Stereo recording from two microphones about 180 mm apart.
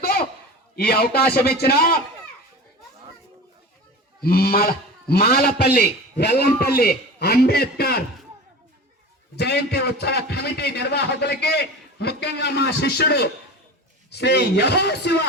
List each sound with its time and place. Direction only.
0.0 s a sound: 60° left (ahead or behind)
0.8 s a man's voice: 60° left (ahead or behind)
4.2 s a man's voice: 60° left (ahead or behind)
9.3 s a man's voice: 65° left (ahead or behind)